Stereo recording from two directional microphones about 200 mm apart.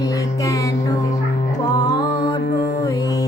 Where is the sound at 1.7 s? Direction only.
20° left (ahead or behind).